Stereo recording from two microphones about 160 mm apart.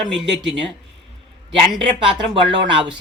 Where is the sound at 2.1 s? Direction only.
30° right (ahead or behind).